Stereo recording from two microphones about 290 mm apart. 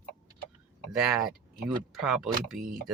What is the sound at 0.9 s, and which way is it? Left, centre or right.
Speech, centre.